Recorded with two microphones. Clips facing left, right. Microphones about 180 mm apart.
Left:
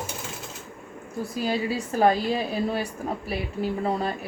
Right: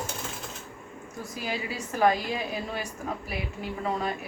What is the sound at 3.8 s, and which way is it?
Speech, 35° left (ahead or behind).